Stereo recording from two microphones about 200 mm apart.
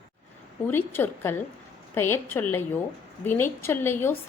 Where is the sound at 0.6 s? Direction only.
10° left (ahead or behind).